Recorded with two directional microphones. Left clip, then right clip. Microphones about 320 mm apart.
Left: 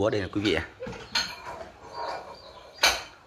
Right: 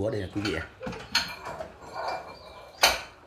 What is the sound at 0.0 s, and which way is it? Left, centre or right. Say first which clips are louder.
Speech: left 4 dB; centre.